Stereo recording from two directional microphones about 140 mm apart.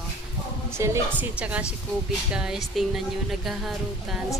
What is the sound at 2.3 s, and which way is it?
Speech, 5° right (ahead or behind).